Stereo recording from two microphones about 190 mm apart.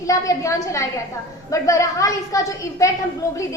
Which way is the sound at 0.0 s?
15° left (ahead or behind).